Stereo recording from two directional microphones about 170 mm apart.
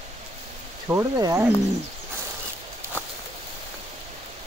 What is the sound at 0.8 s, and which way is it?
Speech, 20° right (ahead or behind).